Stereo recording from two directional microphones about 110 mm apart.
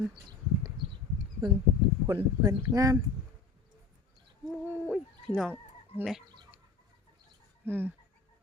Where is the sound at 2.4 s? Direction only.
30° right (ahead or behind).